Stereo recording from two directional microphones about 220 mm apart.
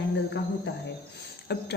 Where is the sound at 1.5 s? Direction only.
50° left (ahead or behind).